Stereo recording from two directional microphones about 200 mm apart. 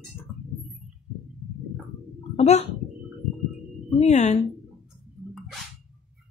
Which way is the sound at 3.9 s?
35° left (ahead or behind).